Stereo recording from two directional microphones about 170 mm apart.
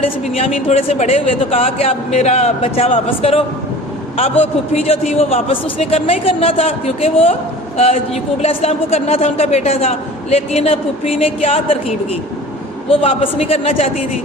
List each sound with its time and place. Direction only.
0.0 s a man's voice: 35° left (ahead or behind)
12.9 s a man's voice: 35° left (ahead or behind)